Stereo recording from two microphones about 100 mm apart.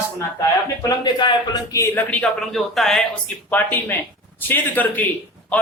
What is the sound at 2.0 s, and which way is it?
Speech, 15° left (ahead or behind).